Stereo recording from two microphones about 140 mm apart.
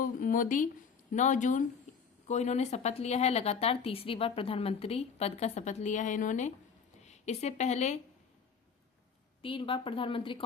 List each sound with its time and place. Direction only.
0.0 s a sound: 75° left (ahead or behind)
1.1 s a woman's voice: 60° left (ahead or behind)
9.4 s a woman's voice: 40° left (ahead or behind)